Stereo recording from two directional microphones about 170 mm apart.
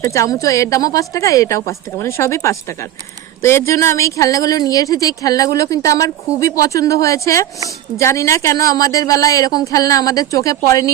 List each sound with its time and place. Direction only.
0.0 s speech: 20° left (ahead or behind)